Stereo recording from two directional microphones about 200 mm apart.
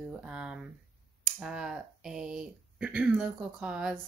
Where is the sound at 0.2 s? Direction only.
5° right (ahead or behind).